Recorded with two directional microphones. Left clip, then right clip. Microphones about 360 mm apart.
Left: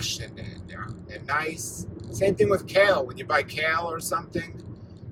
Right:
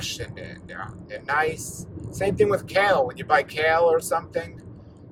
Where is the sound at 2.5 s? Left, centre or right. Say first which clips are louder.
Even; centre.